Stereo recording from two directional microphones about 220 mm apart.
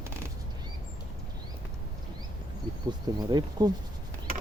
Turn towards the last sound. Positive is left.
turn(degrees=-20)  # may be behind; listen again after turning